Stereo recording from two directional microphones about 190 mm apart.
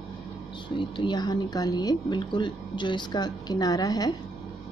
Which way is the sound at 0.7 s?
25° left (ahead or behind).